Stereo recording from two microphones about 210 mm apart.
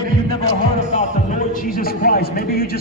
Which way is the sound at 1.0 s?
35° left (ahead or behind).